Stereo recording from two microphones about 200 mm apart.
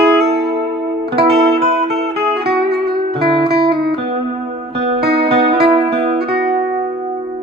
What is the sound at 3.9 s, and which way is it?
Music, 30° right (ahead or behind).